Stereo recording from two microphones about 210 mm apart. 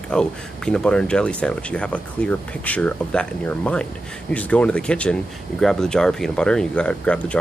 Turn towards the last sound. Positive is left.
turn(degrees=5)  # may be behind; listen again after turning